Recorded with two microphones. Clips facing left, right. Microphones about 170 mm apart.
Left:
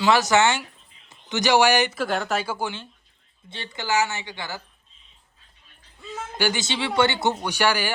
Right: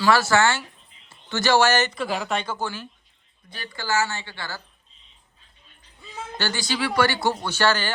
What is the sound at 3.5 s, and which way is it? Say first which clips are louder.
Speech: left 1 dB; 25° left (ahead or behind).